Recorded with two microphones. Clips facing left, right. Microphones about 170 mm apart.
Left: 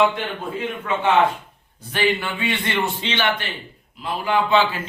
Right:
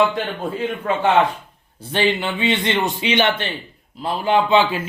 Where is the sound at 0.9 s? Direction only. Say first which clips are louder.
Right 3 dB; 35° right (ahead or behind).